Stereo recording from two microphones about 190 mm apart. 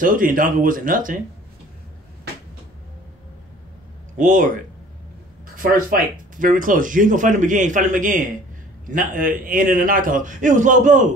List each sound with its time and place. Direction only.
0.0 s speech: 45° right (ahead or behind)
4.2 s speech: 40° right (ahead or behind)
5.6 s speech: 45° right (ahead or behind)